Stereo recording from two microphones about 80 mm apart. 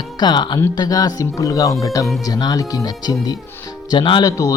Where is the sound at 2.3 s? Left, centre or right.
Left.